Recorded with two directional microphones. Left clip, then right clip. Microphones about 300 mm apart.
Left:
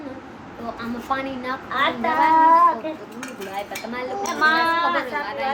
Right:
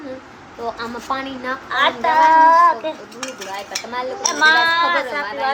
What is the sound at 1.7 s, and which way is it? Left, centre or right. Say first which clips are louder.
Speech: right 5 dB; right.